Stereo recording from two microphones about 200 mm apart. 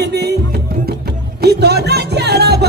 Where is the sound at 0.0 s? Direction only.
55° right (ahead or behind).